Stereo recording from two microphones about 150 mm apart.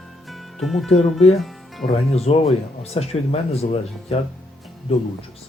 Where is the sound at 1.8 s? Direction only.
40° left (ahead or behind).